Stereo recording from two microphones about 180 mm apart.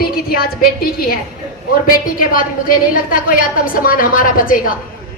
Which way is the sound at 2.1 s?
55° left (ahead or behind).